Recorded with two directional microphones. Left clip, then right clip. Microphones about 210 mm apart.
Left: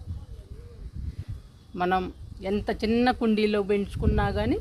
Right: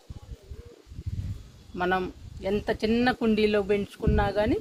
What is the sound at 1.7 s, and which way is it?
Speech, 40° left (ahead or behind).